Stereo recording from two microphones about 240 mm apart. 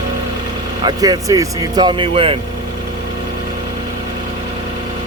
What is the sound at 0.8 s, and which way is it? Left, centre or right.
Speech, centre.